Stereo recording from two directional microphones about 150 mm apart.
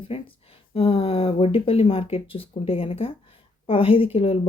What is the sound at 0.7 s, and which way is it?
Speech, 40° left (ahead or behind).